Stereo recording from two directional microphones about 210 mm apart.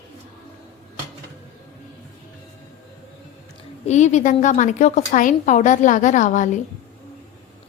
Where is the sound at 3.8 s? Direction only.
35° left (ahead or behind).